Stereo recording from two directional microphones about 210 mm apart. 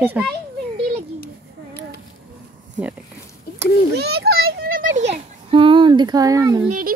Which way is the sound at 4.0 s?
50° right (ahead or behind).